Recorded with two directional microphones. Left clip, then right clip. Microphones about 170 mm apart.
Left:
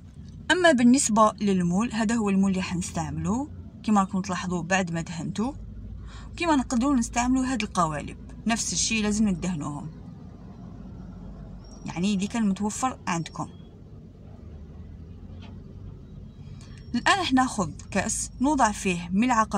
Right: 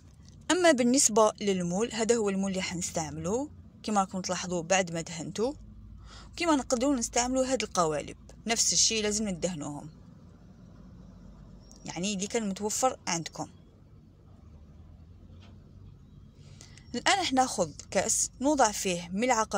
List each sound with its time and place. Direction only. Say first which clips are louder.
0.5 s speech: left 4 dB; 25° right (ahead or behind)
11.8 s speech: left 4 dB; 25° right (ahead or behind)
16.9 s speech: left 4 dB; 25° right (ahead or behind)